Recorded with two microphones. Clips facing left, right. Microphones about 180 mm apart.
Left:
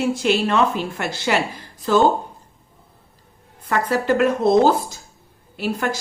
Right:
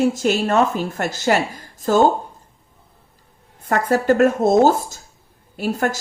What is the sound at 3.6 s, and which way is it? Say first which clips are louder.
Speech: right 2 dB; 45° right (ahead or behind).